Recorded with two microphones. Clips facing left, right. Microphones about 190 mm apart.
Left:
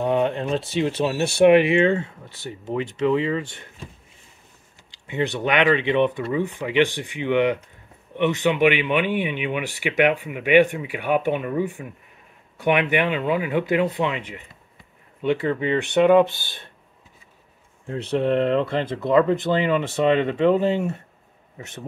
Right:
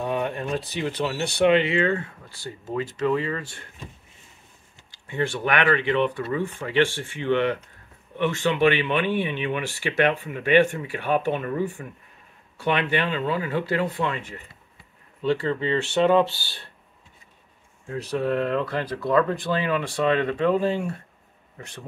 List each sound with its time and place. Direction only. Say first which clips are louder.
0.0 s a sound: left 5 dB; 20° left (ahead or behind)
0.7 s speech: left 5 dB; 20° left (ahead or behind)
5.0 s speech: left 2 dB; 20° left (ahead or behind)
17.8 s speech: left 3 dB; 25° left (ahead or behind)